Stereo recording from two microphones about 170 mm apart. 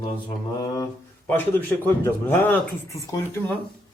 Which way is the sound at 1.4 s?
10° left (ahead or behind).